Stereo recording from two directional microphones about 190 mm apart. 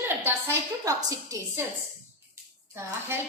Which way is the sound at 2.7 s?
15° right (ahead or behind).